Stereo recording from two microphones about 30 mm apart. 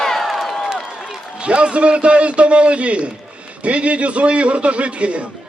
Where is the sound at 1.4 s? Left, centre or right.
Right.